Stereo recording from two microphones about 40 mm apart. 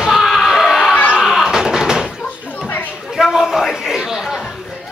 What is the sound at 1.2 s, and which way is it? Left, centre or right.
Music, centre.